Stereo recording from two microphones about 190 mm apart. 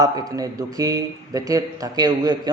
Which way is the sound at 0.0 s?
20° right (ahead or behind).